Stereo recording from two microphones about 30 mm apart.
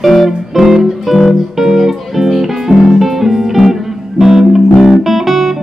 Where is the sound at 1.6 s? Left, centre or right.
Centre.